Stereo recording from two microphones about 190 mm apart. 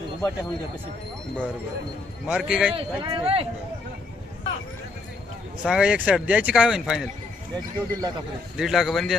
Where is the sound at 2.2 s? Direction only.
5° right (ahead or behind).